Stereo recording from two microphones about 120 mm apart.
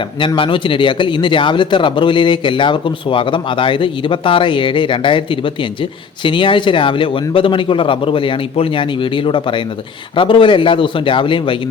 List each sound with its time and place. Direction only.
0.3 s speech: 45° left (ahead or behind)